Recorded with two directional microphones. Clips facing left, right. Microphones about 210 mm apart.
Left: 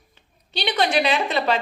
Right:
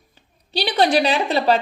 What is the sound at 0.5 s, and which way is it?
A woman's voice, 35° right (ahead or behind).